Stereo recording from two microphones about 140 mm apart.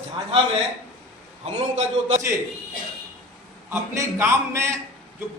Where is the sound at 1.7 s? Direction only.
50° right (ahead or behind).